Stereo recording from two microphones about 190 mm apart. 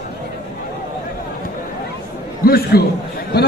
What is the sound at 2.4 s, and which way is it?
Speech, 55° left (ahead or behind).